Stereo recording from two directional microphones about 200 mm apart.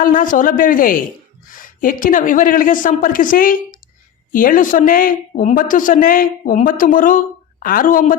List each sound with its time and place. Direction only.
0.0 s speech: 45° left (ahead or behind)